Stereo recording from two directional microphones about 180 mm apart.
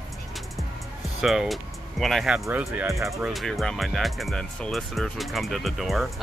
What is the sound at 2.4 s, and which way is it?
Speech, 10° right (ahead or behind).